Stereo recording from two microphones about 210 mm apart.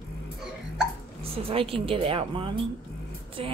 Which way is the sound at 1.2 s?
25° right (ahead or behind).